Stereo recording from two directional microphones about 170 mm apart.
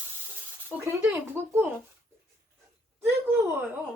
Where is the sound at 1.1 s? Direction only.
10° right (ahead or behind).